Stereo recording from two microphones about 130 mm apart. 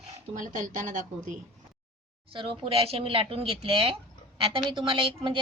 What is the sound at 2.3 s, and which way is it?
A woman's voice, 40° right (ahead or behind).